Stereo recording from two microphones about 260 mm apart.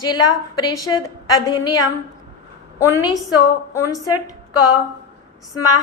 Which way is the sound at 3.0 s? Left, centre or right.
Centre.